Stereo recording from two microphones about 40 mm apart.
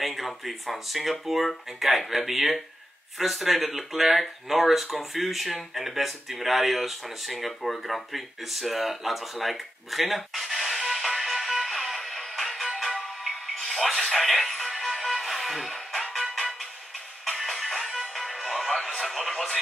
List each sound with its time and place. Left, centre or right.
0.0 s speech: centre
11.8 s music: centre
13.9 s radio: centre
14.3 s music: centre
17.4 s music: centre
18.9 s radio: centre
19.3 s radio: centre